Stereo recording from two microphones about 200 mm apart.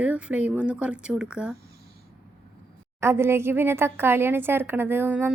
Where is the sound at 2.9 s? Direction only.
10° right (ahead or behind).